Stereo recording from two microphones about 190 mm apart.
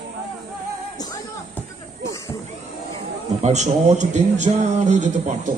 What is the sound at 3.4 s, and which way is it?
Speech, 35° right (ahead or behind).